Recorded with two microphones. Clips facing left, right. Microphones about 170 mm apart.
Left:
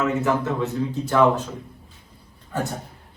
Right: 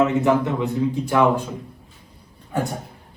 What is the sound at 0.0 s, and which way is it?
A man's voice, 20° right (ahead or behind).